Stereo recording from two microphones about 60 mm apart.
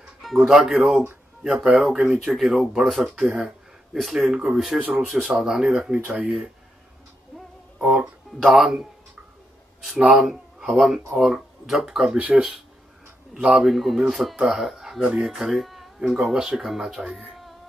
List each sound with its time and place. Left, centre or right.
0.2 s speech: centre
3.2 s speech: centre
3.9 s speech: centre
6.0 s speech: right
7.8 s speech: centre
10.1 s speech: centre
12.2 s speech: right
13.3 s speech: centre
17.2 s a sound: centre